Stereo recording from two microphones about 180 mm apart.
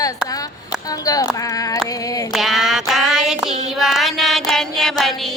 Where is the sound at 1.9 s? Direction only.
20° left (ahead or behind).